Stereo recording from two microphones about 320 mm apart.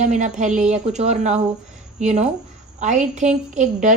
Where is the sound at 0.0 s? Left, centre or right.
Right.